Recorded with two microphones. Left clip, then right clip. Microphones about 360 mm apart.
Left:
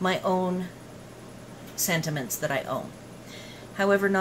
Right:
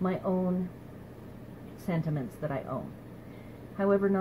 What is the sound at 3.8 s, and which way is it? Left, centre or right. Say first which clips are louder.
Speech: left 4 dB; centre.